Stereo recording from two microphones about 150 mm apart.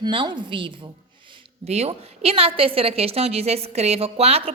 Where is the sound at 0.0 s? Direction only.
30° right (ahead or behind).